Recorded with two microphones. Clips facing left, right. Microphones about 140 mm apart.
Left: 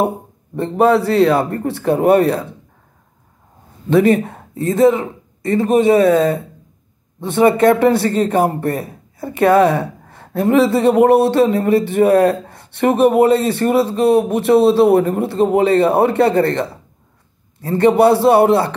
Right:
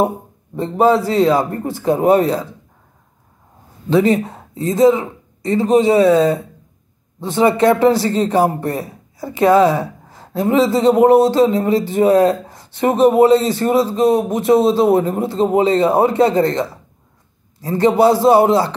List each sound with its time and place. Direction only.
0.6 s a man's voice: 70° left (ahead or behind)
4.1 s a man's voice: 55° left (ahead or behind)
8.7 s a sound: 60° left (ahead or behind)
10.5 s a man's voice: 65° left (ahead or behind)